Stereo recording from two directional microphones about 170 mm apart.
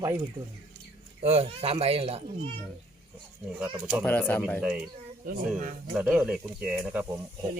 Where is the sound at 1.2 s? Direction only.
35° right (ahead or behind).